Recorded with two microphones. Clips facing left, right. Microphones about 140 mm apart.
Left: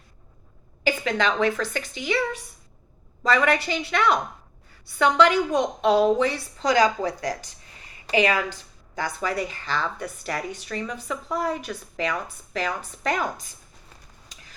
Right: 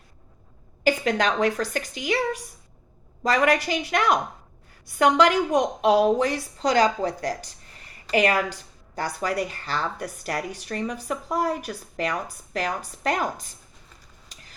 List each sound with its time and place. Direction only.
0.9 s a woman's voice: 40° right (ahead or behind)
3.3 s a woman's voice: 45° right (ahead or behind)
5.5 s a woman's voice: 10° right (ahead or behind)
6.1 s a woman's voice: 40° right (ahead or behind)